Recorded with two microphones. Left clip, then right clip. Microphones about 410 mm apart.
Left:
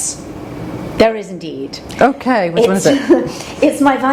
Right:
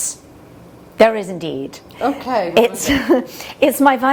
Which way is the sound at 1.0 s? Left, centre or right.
Right.